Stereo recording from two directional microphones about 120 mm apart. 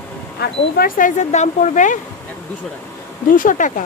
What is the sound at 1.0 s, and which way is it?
Speech, 80° left.